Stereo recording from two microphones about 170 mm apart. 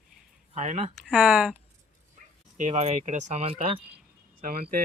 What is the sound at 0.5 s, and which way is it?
Speech, 45° right (ahead or behind).